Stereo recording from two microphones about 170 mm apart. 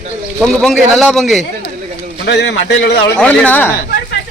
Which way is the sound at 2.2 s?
85° left.